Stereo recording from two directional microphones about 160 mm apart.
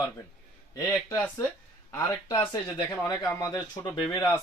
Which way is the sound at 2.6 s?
15° left (ahead or behind).